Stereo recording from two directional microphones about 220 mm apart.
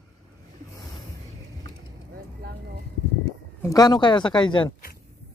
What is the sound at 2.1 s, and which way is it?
Vehicle, 45° right (ahead or behind).